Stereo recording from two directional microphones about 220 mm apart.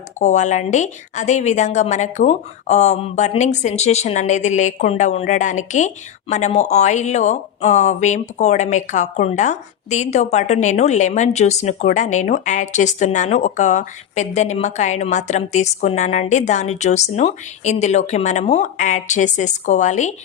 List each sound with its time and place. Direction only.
0.2 s a woman's voice: 35° left (ahead or behind)